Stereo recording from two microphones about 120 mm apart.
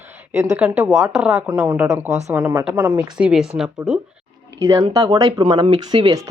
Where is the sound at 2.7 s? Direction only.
25° right (ahead or behind).